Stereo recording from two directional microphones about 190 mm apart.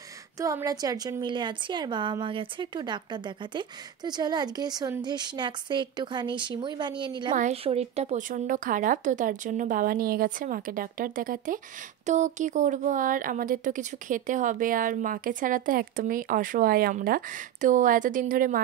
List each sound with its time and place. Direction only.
0.4 s a woman's voice: 15° right (ahead or behind)
7.3 s speech: 35° right (ahead or behind)